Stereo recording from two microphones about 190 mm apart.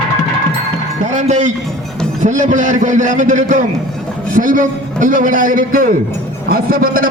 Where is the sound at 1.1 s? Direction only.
40° right (ahead or behind).